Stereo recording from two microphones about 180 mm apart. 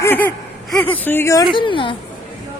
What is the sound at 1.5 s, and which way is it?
Speech, 30° left (ahead or behind).